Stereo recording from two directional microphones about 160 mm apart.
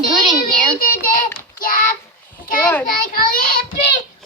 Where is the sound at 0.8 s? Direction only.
60° left (ahead or behind).